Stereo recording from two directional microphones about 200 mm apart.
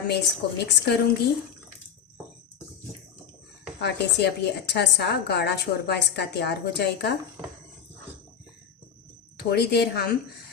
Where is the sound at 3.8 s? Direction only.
55° left (ahead or behind).